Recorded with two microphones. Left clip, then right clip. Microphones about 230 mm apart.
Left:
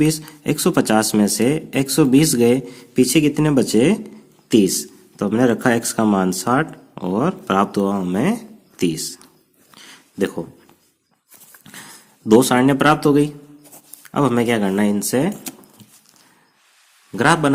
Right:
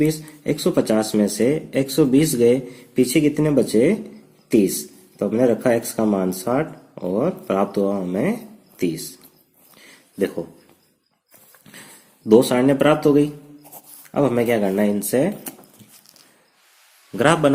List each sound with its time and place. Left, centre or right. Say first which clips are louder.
0.0 s speech: left 2 dB; left
9.7 s a sound: left 1 dB; left
11.6 s speech: left 4 dB; left
17.2 s a man's voice: even; left